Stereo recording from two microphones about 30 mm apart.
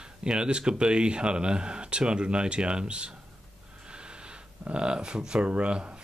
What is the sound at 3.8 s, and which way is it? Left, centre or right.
Snort, right.